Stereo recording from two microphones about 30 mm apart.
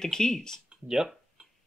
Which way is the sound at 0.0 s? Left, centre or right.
Left.